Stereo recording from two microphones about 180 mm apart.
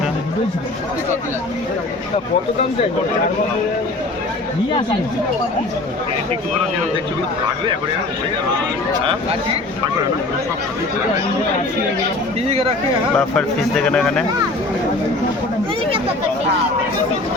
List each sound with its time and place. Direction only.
12.5 s speech: 35° right (ahead or behind)
13.1 s speech: 5° left (ahead or behind)